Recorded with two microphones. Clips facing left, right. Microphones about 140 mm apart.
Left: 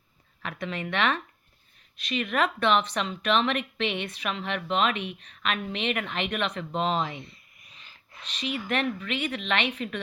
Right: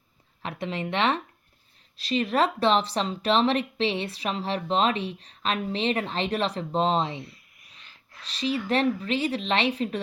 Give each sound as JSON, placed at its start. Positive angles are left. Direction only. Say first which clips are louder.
{"t": 0.4, "sound": "speech", "louder": "right 2 dB", "side_deg": -25}
{"t": 7.2, "sound": "a sound", "louder": "right 3 dB", "side_deg": 0}
{"t": 8.3, "sound": "speech", "louder": "right 4 dB", "side_deg": -30}